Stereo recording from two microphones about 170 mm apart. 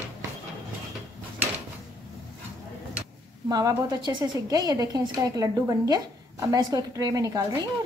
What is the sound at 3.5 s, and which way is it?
A woman's voice, 20° right (ahead or behind).